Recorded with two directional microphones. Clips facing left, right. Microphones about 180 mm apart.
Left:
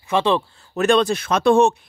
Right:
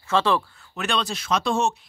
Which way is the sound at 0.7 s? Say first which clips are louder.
Left 10 dB; 45° left (ahead or behind).